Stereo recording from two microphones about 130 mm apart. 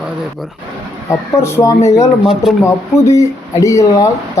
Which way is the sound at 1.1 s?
20° left (ahead or behind).